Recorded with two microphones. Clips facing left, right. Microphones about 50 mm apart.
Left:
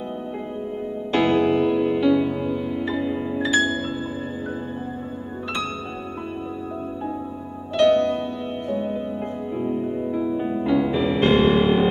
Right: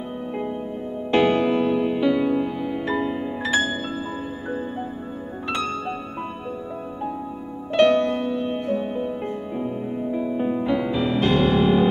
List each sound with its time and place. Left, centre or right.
1.1 s music: centre
7.7 s music: right
8.0 s music: centre
9.6 s music: centre
10.1 s music: centre
10.9 s music: left